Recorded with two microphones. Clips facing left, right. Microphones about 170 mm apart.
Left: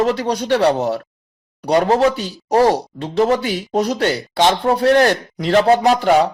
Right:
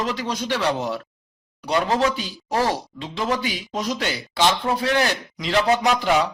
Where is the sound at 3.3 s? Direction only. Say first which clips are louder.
Left 8 dB; 60° left (ahead or behind); by 6.3 s 40° left (ahead or behind).